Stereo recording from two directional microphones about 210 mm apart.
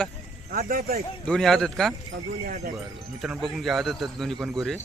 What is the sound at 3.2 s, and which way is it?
Speech, centre (ahead or behind).